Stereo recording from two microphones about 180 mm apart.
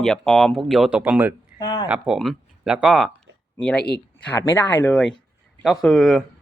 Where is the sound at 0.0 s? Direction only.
Centre (ahead or behind).